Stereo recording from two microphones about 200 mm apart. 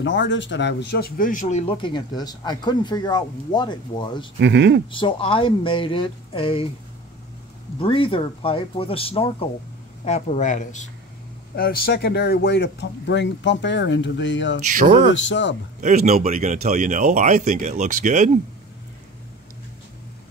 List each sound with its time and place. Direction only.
0.0 s speech: 65° left (ahead or behind); by 4.3 s 25° left (ahead or behind)
4.4 s speech: 60° right (ahead or behind)
4.9 s speech: 25° left (ahead or behind)
7.8 s speech: 25° left (ahead or behind)
11.5 s speech: 50° left (ahead or behind); by 14.6 s 65° left (ahead or behind)
14.7 s speech: 40° right (ahead or behind)
15.2 s speech: 65° left (ahead or behind)
15.8 s speech: 35° right (ahead or behind)